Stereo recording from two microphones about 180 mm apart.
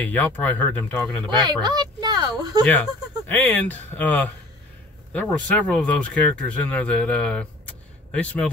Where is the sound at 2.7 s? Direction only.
10° left (ahead or behind).